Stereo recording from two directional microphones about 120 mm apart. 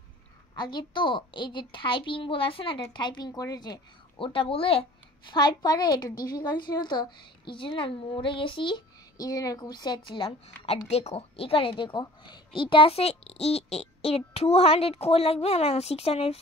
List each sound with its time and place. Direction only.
0.6 s a woman's voice: 40° left (ahead or behind)
4.2 s a woman's voice: 45° left (ahead or behind)
5.3 s a woman's voice: 35° left (ahead or behind)
10.9 s a woman's voice: 60° left (ahead or behind)